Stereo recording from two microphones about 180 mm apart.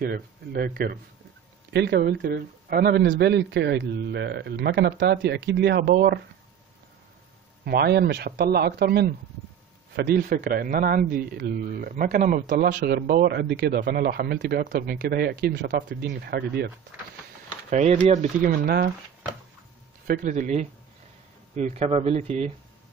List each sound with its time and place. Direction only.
0.0 s speech: 60° right (ahead or behind)
1.7 s speech: 65° right (ahead or behind)
7.6 s speech: 65° right (ahead or behind)
12.6 s speech: 60° right (ahead or behind)
17.6 s speech: 40° right (ahead or behind); by 18.9 s 60° right (ahead or behind)
20.1 s speech: 45° right (ahead or behind)